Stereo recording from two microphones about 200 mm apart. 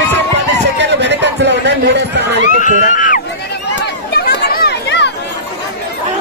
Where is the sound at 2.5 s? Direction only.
40° left (ahead or behind).